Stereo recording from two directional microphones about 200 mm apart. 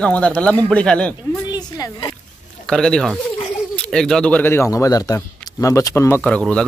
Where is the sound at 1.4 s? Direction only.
20° left (ahead or behind).